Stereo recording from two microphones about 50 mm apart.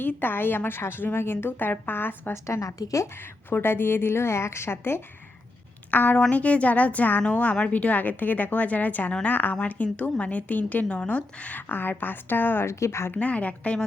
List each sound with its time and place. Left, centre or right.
0.2 s a woman's voice: left
2.3 s a woman's voice: left
3.2 s a woman's voice: left
5.9 s a woman's voice: left
12.6 s speech: left
13.1 s a woman's voice: left